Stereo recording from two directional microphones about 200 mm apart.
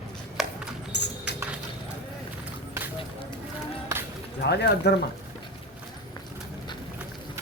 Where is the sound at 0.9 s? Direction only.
60° left (ahead or behind).